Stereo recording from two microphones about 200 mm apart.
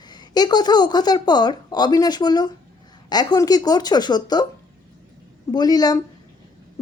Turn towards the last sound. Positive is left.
turn(degrees=20)  # may be behind; listen again after turning